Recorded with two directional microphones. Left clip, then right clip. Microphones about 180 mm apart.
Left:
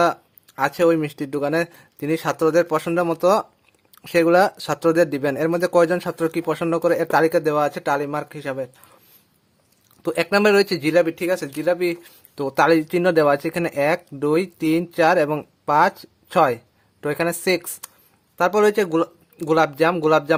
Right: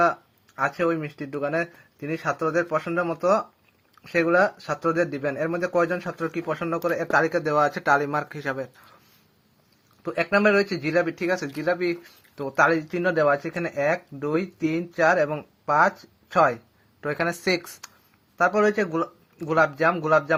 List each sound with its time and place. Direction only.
0.0 s speech: 35° left (ahead or behind)
10.0 s speech: 40° left (ahead or behind); by 17.7 s 25° left (ahead or behind)
18.3 s speech: 35° left (ahead or behind)